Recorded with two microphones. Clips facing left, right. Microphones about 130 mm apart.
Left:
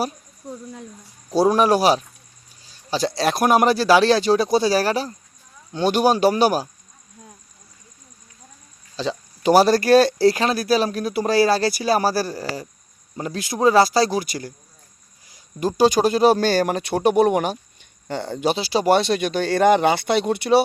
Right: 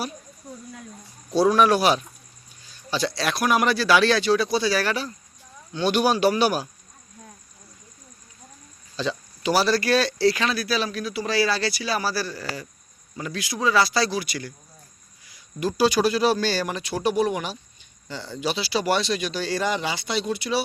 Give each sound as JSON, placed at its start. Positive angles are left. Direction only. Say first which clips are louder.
{"t": 1.3, "sound": "speech", "louder": "left 2 dB", "side_deg": 40}
{"t": 9.0, "sound": "speech", "louder": "left 2 dB", "side_deg": 35}
{"t": 9.4, "sound": "speech", "louder": "left 6 dB", "side_deg": 45}